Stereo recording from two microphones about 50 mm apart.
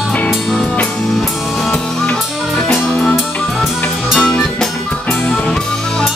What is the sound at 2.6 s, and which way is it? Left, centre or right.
Music, centre.